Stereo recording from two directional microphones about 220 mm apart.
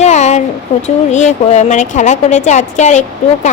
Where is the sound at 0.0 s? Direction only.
30° left (ahead or behind).